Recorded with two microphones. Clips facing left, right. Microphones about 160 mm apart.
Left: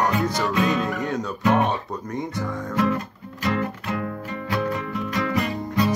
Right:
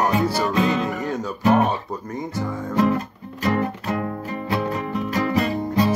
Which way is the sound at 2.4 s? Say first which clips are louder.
Right 4 dB; 30° right (ahead or behind).